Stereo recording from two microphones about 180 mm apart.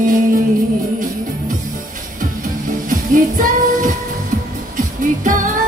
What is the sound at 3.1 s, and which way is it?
Music, 50° right (ahead or behind).